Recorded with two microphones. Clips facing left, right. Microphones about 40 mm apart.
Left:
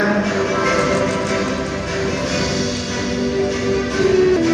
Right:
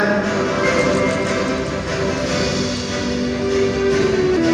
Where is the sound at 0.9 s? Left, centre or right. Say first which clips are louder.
Right 1 dB; right.